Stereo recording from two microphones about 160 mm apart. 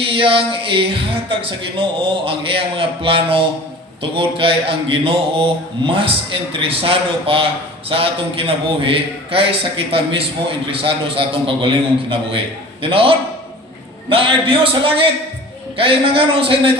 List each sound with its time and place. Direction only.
0.1 s a man's voice: 35° right (ahead or behind)